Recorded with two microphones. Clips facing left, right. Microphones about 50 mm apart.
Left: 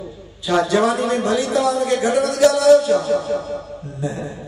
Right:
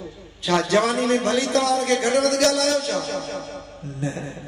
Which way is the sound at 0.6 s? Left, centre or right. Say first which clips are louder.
Left 3 dB; right.